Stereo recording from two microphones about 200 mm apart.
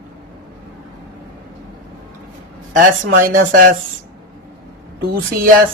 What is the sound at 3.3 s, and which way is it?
Speech, 45° right (ahead or behind).